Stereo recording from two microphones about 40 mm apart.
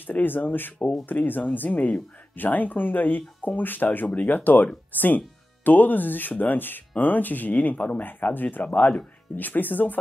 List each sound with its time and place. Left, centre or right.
0.0 s speech: left
8.0 s speech: left